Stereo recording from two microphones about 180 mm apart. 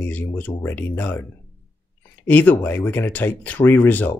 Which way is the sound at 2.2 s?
10° left (ahead or behind).